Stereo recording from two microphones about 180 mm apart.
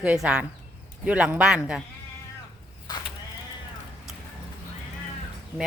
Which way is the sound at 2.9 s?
25° left (ahead or behind).